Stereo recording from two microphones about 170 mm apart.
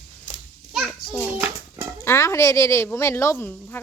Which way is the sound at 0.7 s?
Centre (ahead or behind).